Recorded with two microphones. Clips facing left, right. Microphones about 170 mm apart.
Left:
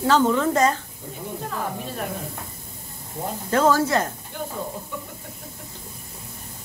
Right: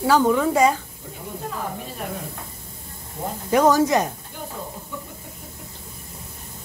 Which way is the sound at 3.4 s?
15° right (ahead or behind).